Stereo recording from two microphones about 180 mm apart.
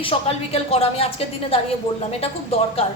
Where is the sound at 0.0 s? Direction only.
35° left (ahead or behind).